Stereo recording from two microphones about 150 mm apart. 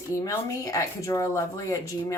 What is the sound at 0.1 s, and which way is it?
Speech, 20° left (ahead or behind).